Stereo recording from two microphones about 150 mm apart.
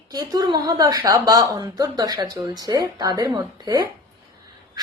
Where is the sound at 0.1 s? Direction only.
25° right (ahead or behind).